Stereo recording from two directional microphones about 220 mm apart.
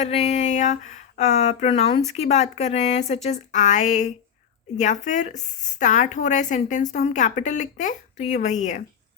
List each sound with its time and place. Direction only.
0.0 s a woman's voice: 30° left (ahead or behind)